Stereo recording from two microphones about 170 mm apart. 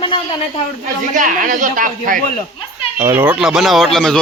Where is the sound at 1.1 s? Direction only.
50° right (ahead or behind).